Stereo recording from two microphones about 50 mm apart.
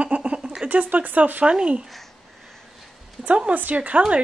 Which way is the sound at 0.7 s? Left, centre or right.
Right.